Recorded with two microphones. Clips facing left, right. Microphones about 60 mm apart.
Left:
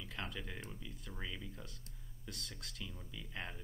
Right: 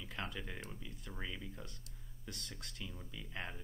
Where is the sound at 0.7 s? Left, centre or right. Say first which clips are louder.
Even; centre.